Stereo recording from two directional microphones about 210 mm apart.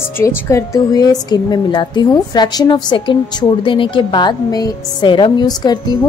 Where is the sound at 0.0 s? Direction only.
10° left (ahead or behind).